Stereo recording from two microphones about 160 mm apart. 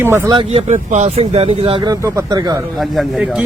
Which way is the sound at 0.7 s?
45° right (ahead or behind).